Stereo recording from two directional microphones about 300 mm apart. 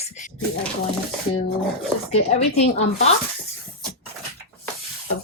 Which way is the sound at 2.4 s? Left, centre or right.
Left.